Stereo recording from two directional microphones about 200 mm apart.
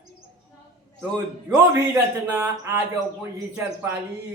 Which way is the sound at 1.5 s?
15° right (ahead or behind).